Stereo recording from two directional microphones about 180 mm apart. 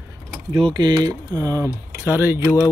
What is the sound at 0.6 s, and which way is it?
Speech, 25° right (ahead or behind).